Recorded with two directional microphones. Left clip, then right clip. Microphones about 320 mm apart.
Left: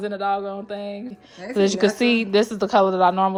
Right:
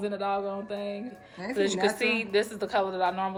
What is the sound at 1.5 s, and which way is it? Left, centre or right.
Speech, centre.